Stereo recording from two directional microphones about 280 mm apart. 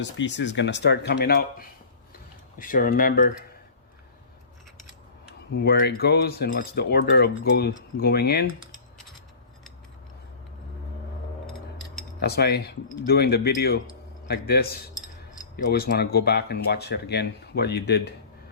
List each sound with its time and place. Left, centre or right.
0.0 s speech: left
5.5 s speech: left
12.2 s speech: left